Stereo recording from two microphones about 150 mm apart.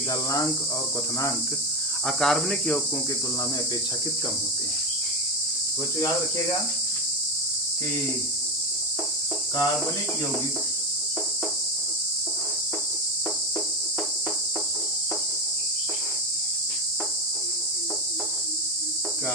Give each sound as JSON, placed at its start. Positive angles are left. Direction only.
{"t": 2.0, "sound": "cricket", "side_deg": 5}